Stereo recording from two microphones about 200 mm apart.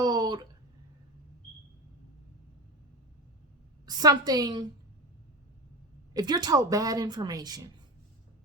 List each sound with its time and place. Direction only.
0.0 s a sound: 20° right (ahead or behind)
3.8 s a woman's voice: 20° right (ahead or behind)
6.1 s a woman's voice: 20° right (ahead or behind)